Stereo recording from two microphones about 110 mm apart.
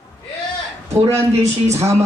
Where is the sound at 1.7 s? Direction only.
25° right (ahead or behind).